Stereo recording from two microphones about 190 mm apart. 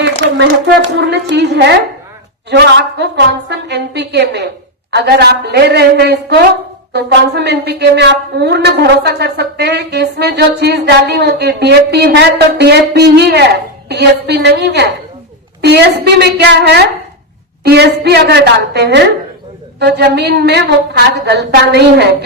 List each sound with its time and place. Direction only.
0.0 s a woman's voice: 70° right (ahead or behind)